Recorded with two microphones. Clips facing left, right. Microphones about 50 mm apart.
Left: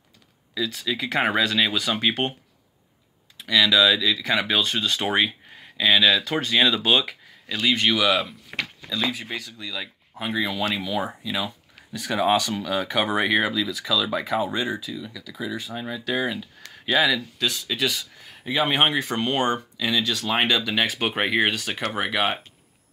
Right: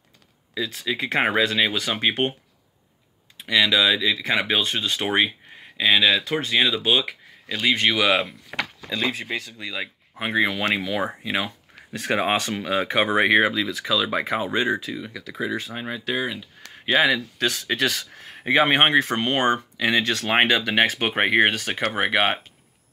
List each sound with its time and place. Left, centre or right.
0.6 s speech: right
3.3 s speech: right
8.8 s speech: right
9.2 s speech: right
15.0 s speech: right
17.4 s speech: right
18.8 s speech: right
20.0 s speech: right